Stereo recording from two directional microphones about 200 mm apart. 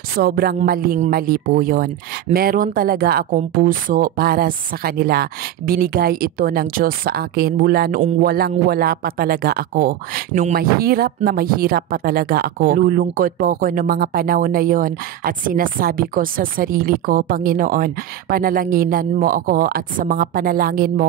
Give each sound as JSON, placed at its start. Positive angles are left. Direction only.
{"t": 0.2, "sound": "speech", "side_deg": -50}